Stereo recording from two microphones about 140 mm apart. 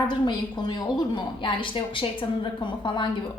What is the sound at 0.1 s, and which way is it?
A woman's voice, 30° left (ahead or behind).